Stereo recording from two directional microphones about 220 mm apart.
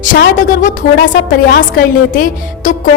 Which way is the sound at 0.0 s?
35° left (ahead or behind).